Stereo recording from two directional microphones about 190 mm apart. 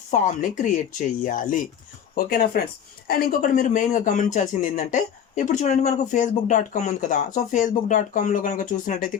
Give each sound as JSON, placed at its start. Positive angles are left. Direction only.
{"t": 0.1, "sound": "speech", "side_deg": 40}